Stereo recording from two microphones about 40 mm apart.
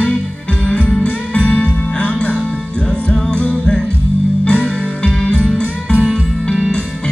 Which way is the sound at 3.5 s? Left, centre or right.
Left.